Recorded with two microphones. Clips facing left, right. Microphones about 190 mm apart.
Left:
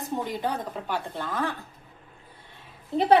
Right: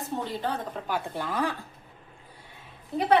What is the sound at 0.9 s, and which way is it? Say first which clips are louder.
Speech: right 2 dB; 10° right (ahead or behind).